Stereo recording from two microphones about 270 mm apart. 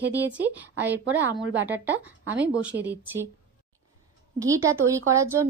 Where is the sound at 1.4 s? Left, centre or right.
Right.